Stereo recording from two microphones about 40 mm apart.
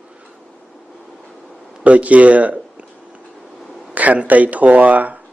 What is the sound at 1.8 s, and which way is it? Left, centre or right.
Speech, right.